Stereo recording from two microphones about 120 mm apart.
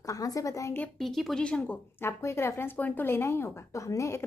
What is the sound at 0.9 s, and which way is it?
Speech, centre (ahead or behind).